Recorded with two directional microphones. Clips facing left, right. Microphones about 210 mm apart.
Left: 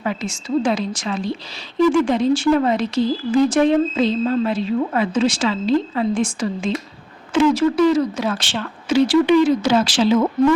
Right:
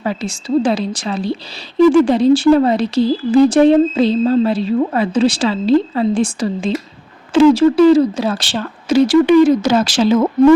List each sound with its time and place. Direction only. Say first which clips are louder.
0.0 s speech: right 3 dB; 35° right (ahead or behind)